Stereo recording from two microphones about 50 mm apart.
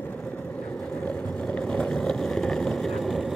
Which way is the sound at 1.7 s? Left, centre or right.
Centre.